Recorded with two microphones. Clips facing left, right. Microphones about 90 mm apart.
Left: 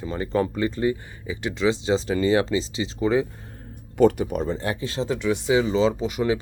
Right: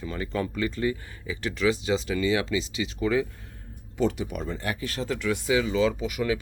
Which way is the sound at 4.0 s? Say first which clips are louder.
Left 8 dB; 50° left (ahead or behind).